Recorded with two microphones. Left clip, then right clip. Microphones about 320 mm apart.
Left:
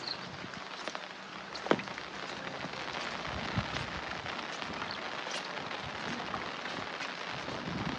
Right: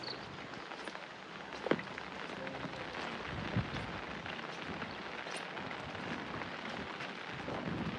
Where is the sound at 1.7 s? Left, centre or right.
Centre.